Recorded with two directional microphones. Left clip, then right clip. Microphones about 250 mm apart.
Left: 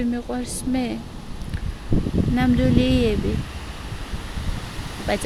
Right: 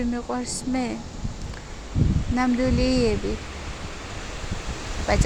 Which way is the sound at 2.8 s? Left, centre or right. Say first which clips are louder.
Left 1 dB; left.